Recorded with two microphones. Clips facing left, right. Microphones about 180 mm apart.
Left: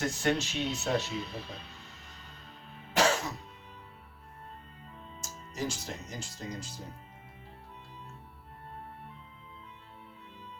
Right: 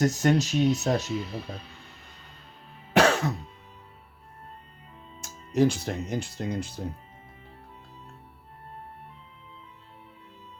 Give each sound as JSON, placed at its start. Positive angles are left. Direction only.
{"t": 0.0, "sound": "speech", "side_deg": -40}
{"t": 2.9, "sound": "music", "side_deg": -65}
{"t": 5.2, "sound": "speech", "side_deg": -60}